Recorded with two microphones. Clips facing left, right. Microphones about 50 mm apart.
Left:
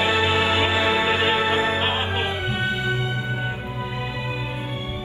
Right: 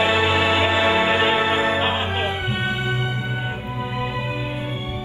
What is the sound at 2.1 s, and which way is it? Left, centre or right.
Music, centre.